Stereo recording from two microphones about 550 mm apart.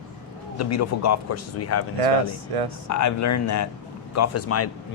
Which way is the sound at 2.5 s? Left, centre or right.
Right.